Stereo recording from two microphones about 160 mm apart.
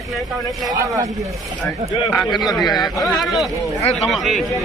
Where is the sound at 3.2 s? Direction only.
Centre (ahead or behind).